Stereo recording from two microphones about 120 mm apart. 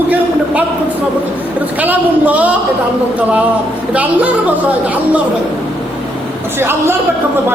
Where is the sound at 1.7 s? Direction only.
15° right (ahead or behind).